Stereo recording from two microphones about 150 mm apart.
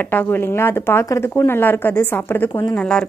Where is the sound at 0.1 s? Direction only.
15° left (ahead or behind).